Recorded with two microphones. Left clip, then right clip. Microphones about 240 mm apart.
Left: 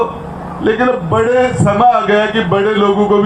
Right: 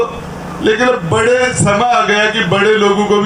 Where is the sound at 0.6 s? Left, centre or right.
Right.